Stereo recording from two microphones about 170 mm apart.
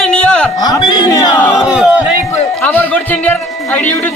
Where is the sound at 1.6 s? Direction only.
5° right (ahead or behind).